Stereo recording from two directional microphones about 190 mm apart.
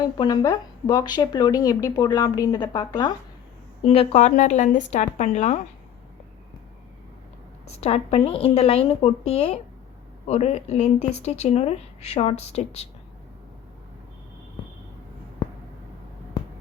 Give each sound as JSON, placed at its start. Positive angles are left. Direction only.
{"t": 0.2, "sound": "speech", "side_deg": 20}
{"t": 7.7, "sound": "speech", "side_deg": 35}